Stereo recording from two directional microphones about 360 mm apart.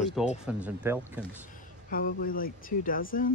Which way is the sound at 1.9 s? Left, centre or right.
Left.